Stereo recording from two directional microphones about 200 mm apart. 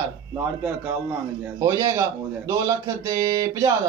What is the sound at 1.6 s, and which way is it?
Speech, 15° right (ahead or behind).